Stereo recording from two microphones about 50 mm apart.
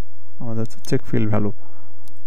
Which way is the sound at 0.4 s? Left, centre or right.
Right.